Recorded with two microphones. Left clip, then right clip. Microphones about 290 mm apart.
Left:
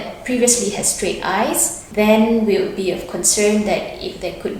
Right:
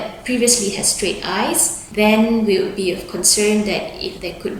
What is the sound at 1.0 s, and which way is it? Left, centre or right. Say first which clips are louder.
A woman's voice: left 3 dB; centre.